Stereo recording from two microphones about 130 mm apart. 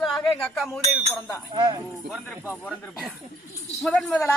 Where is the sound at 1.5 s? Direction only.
35° right (ahead or behind).